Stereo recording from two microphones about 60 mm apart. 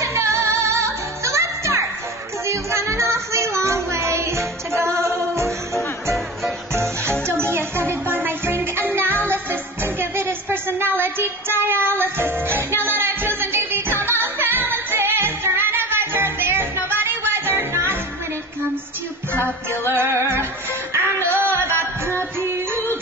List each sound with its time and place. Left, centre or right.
0.0 s music: right
2.4 s a sound: right
6.7 s music: right
19.3 s music: left
19.9 s music: right